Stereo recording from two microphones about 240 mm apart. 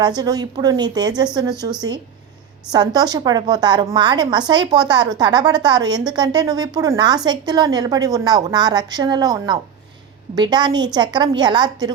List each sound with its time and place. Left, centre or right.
0.2 s a woman's voice: centre